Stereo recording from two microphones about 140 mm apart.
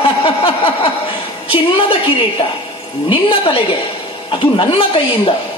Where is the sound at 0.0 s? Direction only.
40° left (ahead or behind).